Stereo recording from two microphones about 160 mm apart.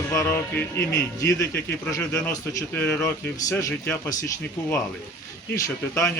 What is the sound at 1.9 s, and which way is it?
Speech, 15° left (ahead or behind).